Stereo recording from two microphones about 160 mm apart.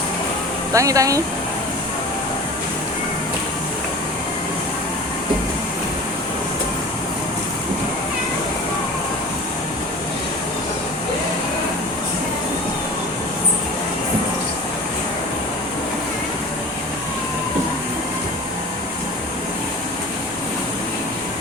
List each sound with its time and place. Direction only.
0.7 s speech: 20° right (ahead or behind)